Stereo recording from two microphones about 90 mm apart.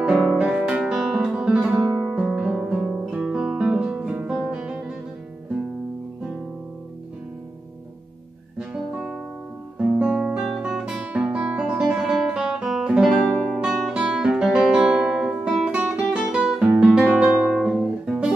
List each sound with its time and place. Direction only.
0.0 s music: 5° right (ahead or behind)
0.4 s guitar: 5° right (ahead or behind)
8.5 s music: 10° right (ahead or behind)
9.8 s guitar: 10° right (ahead or behind)
17.5 s guitar: 5° right (ahead or behind)